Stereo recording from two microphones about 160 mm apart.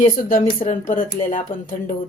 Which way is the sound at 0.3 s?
55° left (ahead or behind).